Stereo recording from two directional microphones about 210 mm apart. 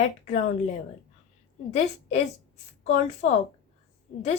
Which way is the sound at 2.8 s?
35° left (ahead or behind).